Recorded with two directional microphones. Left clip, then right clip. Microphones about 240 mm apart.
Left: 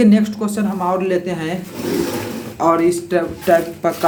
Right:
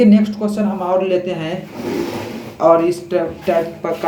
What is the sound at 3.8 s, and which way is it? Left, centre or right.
Speech, left.